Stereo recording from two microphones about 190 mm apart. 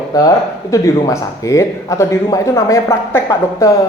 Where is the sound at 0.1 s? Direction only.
20° left (ahead or behind).